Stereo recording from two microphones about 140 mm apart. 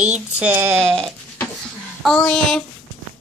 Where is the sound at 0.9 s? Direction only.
Centre (ahead or behind).